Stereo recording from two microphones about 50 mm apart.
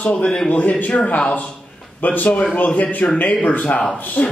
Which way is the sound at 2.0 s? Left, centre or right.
Left.